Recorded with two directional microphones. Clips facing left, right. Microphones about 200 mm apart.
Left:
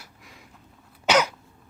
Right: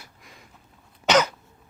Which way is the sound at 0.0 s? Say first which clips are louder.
Even; 5° left (ahead or behind).